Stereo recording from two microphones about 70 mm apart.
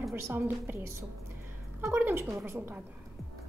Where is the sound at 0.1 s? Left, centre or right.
Right.